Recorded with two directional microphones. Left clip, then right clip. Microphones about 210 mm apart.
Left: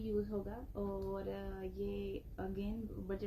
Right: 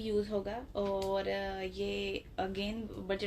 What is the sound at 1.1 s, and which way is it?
A woman's voice, 15° right (ahead or behind).